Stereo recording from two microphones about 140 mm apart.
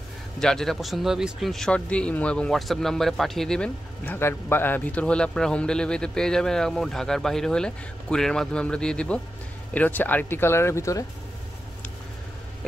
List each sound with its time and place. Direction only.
0.4 s speech: 5° left (ahead or behind); by 11.1 s 20° left (ahead or behind)